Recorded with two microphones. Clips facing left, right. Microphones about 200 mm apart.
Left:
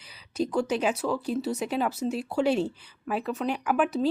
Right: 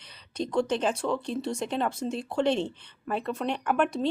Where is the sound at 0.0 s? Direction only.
5° left (ahead or behind).